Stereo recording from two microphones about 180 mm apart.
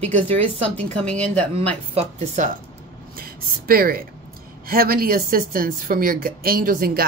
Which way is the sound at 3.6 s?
55° right (ahead or behind).